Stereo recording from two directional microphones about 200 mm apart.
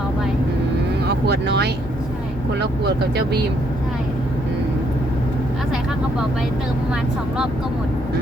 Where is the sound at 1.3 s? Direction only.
55° right (ahead or behind).